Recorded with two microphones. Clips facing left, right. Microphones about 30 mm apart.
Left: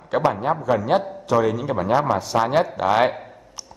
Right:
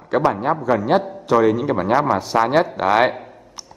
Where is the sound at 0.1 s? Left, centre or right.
Centre.